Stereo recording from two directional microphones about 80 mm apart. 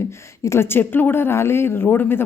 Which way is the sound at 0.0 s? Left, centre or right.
Left.